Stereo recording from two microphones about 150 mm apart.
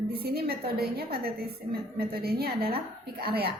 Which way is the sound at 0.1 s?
90° right.